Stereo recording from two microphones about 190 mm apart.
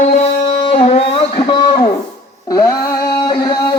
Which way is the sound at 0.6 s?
30° left (ahead or behind).